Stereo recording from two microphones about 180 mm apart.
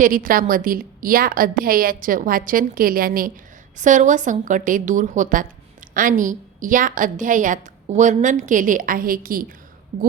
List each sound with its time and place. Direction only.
0.0 s a woman's voice: 50° right (ahead or behind)